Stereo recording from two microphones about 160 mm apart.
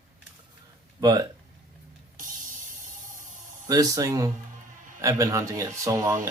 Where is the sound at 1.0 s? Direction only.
25° right (ahead or behind).